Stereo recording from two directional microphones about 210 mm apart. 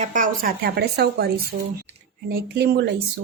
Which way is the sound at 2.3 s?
50° right (ahead or behind).